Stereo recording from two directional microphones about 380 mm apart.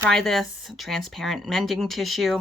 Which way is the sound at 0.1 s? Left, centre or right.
Centre.